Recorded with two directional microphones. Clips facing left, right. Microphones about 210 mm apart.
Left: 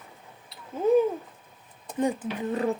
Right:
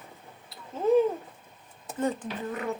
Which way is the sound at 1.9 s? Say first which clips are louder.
Left 3 dB; 15° left (ahead or behind).